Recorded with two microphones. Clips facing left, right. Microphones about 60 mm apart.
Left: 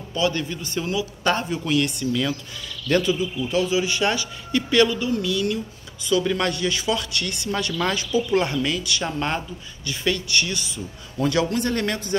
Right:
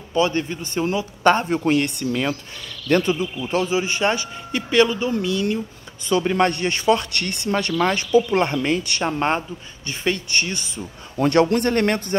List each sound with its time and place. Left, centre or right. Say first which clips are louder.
0.1 s a man's voice: right 3 dB; right
9.8 s a man's voice: right 1 dB; right
11.1 s speech: right 5 dB; right